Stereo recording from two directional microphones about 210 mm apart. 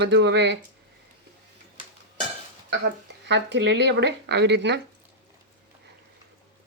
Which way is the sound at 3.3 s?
55° right (ahead or behind).